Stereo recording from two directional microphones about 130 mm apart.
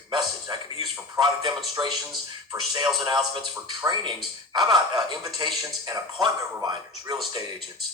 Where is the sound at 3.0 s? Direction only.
35° right (ahead or behind).